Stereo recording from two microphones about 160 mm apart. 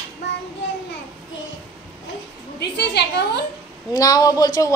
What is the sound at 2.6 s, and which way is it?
Speech, 90° left.